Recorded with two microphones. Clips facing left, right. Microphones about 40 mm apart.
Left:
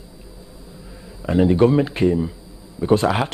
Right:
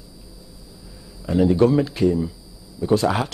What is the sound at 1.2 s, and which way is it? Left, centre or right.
Speech, left.